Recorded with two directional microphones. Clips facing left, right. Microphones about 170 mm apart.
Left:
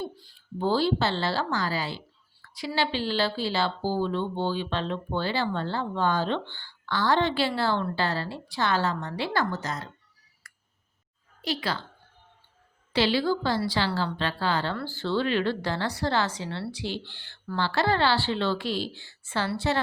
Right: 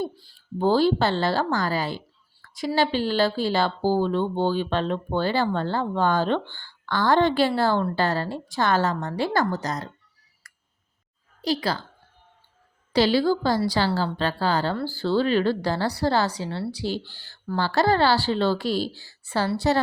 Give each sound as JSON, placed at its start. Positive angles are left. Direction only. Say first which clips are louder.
{"t": 0.6, "sound": "speech", "louder": "right 5 dB", "side_deg": -45}
{"t": 11.4, "sound": "speech", "louder": "right 5 dB", "side_deg": -40}
{"t": 12.9, "sound": "speech", "louder": "right 4 dB", "side_deg": -40}